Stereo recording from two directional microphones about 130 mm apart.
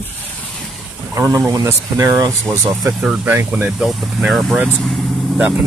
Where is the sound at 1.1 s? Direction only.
25° right (ahead or behind).